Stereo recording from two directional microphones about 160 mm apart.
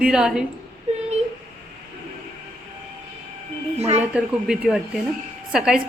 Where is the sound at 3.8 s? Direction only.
40° right (ahead or behind).